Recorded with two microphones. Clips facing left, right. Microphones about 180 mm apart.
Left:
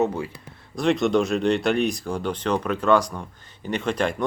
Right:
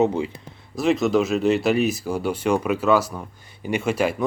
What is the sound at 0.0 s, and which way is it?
Speech, 20° right (ahead or behind).